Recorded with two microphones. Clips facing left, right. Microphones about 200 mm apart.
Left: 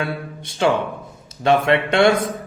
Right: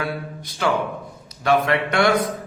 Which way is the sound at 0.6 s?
25° left (ahead or behind).